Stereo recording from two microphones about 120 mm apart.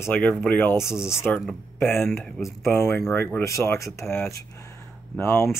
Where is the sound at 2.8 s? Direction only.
20° left (ahead or behind).